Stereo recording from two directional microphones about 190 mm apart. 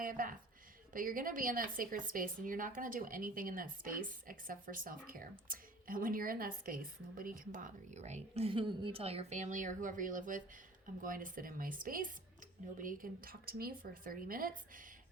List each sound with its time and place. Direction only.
0.0 s a woman's voice: 45° right (ahead or behind)